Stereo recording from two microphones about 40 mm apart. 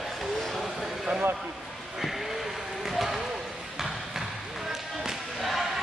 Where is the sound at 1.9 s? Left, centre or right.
Centre.